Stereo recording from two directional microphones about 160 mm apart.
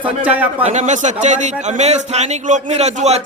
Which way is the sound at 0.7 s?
50° right (ahead or behind).